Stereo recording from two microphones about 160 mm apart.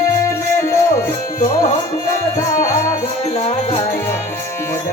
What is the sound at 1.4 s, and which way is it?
Music, 55° left (ahead or behind).